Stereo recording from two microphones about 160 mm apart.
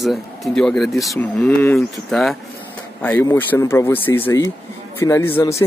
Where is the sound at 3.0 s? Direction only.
15° left (ahead or behind).